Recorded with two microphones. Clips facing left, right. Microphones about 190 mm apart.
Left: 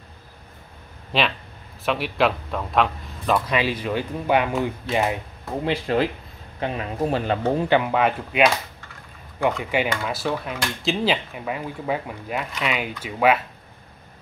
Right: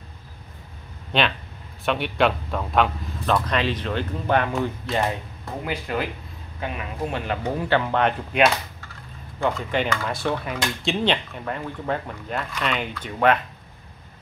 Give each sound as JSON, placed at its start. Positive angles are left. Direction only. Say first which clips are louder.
{"t": 1.1, "sound": "speech", "louder": "even", "side_deg": 0}
{"t": 5.6, "sound": "speech", "louder": "left 6 dB", "side_deg": 30}